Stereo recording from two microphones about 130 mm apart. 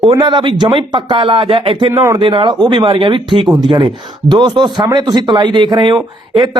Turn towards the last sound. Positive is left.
turn(degrees=-35)  # may be behind; listen again after turning